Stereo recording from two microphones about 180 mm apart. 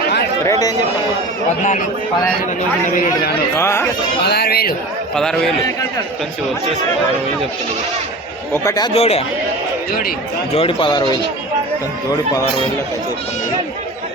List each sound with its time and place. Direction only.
2.9 s a man's voice: 45° left (ahead or behind)
3.5 s speech: 15° left (ahead or behind)
4.3 s speech: 60° left (ahead or behind)
5.1 s a man's voice: 5° left (ahead or behind)
8.5 s speech: 20° left (ahead or behind)
8.9 s speech: 35° left (ahead or behind)
10.5 s speech: 30° left (ahead or behind)